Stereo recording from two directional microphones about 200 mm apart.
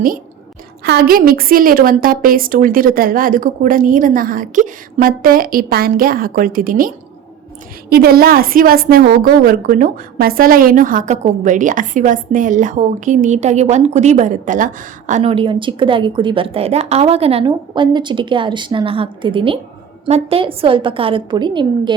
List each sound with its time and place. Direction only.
0.9 s a woman's voice: 50° right (ahead or behind); by 21.9 s 25° right (ahead or behind)